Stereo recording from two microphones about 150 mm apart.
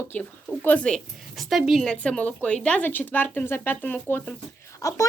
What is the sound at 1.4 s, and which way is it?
Speech, centre (ahead or behind).